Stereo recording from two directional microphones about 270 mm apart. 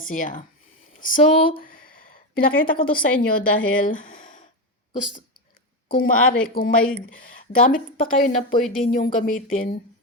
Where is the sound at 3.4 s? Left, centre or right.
Left.